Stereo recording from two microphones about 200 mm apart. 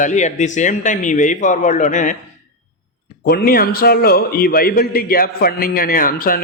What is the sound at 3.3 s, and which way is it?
A man's voice, 50° left (ahead or behind).